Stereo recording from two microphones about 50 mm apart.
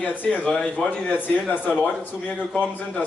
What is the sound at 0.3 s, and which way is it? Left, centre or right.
Speech, left.